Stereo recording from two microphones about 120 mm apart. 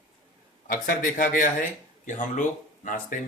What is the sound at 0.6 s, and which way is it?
Speech, 90° left.